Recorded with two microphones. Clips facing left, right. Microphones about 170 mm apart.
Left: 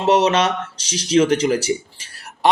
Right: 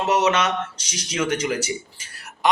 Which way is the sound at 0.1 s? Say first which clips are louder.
Left 5 dB; 30° left (ahead or behind).